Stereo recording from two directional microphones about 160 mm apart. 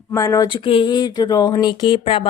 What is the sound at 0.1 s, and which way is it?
Speech, 20° left (ahead or behind).